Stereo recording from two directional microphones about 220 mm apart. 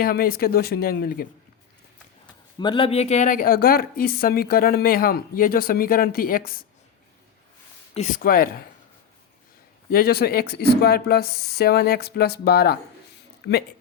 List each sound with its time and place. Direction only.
0.0 s speech: 45° left (ahead or behind)
2.6 s a woman's voice: 20° left (ahead or behind); by 6.6 s 40° left (ahead or behind)
7.9 s a woman's voice: 35° left (ahead or behind)
9.9 s speech: 45° left (ahead or behind)